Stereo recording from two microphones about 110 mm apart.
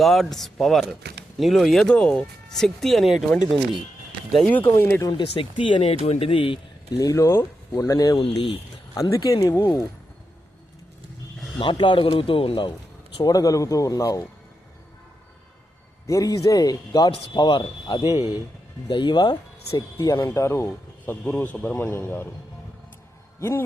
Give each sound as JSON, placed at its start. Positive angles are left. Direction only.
{"t": 0.0, "sound": "speech", "side_deg": 0}
{"t": 4.4, "sound": "speech", "side_deg": 10}
{"t": 4.7, "sound": "speech", "side_deg": 20}
{"t": 5.0, "sound": "speech", "side_deg": 50}
{"t": 7.0, "sound": "speech", "side_deg": 30}
{"t": 7.8, "sound": "speech", "side_deg": 35}
{"t": 11.6, "sound": "speech", "side_deg": 50}
{"t": 13.2, "sound": "speech", "side_deg": 30}
{"t": 16.0, "sound": "speech", "side_deg": 30}
{"t": 20.0, "sound": "speech", "side_deg": 25}
{"t": 23.4, "sound": "speech", "side_deg": 20}